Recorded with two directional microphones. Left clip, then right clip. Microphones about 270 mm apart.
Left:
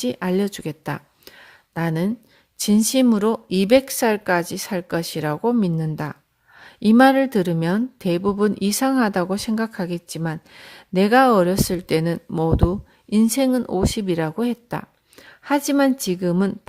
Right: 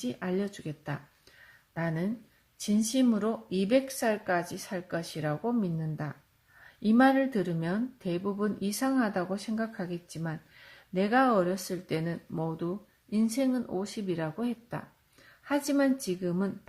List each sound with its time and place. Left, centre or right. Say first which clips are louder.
0.0 s speech: left 11 dB; left